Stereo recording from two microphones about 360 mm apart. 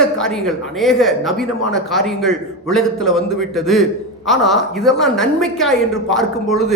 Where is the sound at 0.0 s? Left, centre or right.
Centre.